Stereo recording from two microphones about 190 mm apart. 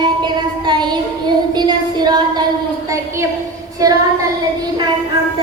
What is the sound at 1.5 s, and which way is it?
A woman's voice, 20° right (ahead or behind).